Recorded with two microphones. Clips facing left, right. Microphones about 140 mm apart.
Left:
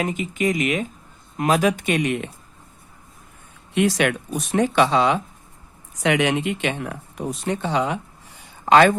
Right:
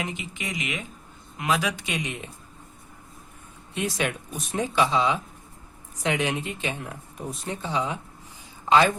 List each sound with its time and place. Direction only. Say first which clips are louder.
0.0 s speech: left 10 dB; 45° left (ahead or behind); by 2.3 s 65° left (ahead or behind)
3.8 s speech: left 8 dB; 75° left (ahead or behind)
6.0 s speech: left 6 dB; 80° left
8.4 s a sound: left 5 dB; 65° left (ahead or behind)